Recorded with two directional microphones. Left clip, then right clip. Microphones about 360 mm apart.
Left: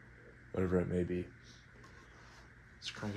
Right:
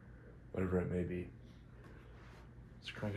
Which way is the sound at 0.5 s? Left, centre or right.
Left.